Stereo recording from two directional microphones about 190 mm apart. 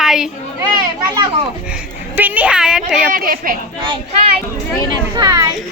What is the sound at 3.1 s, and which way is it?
Speech, 50° right (ahead or behind).